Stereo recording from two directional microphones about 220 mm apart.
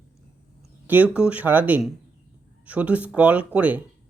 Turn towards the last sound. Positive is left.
turn(degrees=-5)  # may be behind; listen again after turning